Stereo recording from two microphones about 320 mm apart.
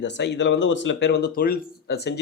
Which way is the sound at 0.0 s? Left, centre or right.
Left.